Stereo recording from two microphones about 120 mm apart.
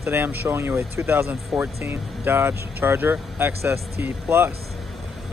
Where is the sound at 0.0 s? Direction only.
20° right (ahead or behind).